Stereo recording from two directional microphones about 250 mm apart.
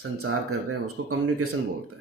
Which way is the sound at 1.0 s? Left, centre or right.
Right.